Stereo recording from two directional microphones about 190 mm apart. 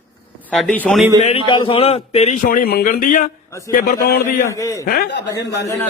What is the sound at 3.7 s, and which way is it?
Speech, 50° left (ahead or behind).